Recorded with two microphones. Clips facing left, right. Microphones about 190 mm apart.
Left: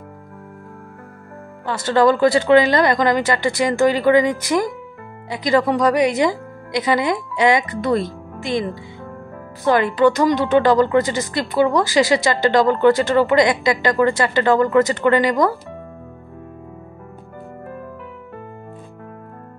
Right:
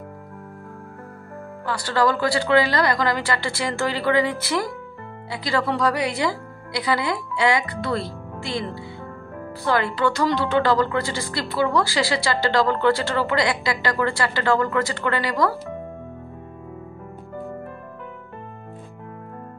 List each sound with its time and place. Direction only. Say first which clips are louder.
1.7 s speech: left 6 dB; 20° left (ahead or behind)
9.7 s speech: left 7 dB; 20° left (ahead or behind)